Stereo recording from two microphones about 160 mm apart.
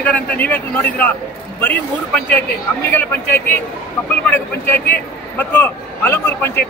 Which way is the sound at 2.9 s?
10° left (ahead or behind).